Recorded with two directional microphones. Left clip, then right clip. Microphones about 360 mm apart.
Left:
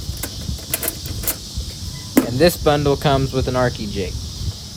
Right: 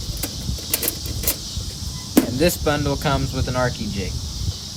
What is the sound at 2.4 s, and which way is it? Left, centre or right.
Speech, centre.